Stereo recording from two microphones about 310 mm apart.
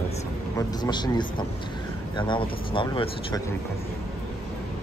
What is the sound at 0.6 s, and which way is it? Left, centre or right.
Speech, centre.